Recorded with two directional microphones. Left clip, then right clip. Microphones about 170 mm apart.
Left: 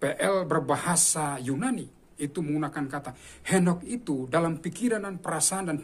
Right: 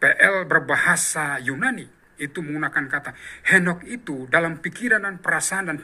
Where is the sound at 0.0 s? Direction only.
30° left (ahead or behind).